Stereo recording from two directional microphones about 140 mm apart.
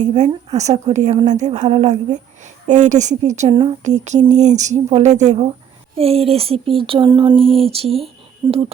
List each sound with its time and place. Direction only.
0.0 s a woman's voice: 55° right (ahead or behind)
2.6 s a woman's voice: 60° right (ahead or behind)
3.5 s speech: 35° right (ahead or behind)
3.8 s a woman's voice: 55° right (ahead or behind)